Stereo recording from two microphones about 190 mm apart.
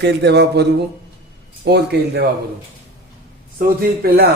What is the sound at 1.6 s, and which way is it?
Speech, 60° right (ahead or behind).